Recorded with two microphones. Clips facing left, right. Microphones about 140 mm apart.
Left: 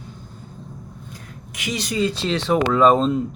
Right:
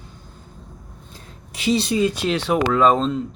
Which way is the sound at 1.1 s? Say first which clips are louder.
Left 3 dB; 30° right (ahead or behind).